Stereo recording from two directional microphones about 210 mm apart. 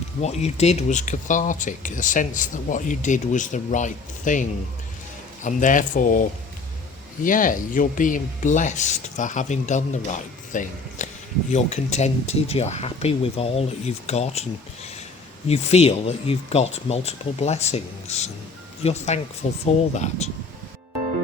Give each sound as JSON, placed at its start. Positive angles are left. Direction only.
{"t": 0.2, "sound": "speech", "side_deg": 30}
{"t": 7.3, "sound": "speech", "side_deg": 40}
{"t": 15.4, "sound": "speech", "side_deg": 30}